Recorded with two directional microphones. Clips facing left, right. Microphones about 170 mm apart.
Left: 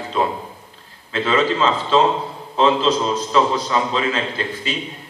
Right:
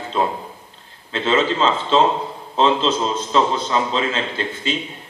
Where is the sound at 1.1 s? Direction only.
25° right (ahead or behind).